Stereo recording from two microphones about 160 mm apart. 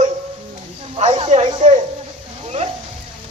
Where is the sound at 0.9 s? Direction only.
40° right (ahead or behind).